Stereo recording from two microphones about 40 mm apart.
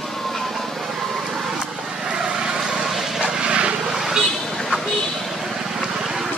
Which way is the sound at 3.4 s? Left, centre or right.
Right.